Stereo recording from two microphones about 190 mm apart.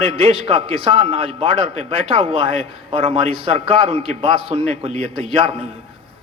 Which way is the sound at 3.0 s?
35° right (ahead or behind).